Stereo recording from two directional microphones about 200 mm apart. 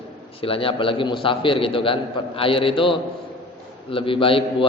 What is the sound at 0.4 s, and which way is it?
A man's voice, 25° left (ahead or behind).